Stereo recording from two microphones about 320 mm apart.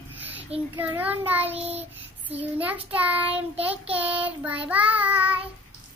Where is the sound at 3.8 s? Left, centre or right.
Centre.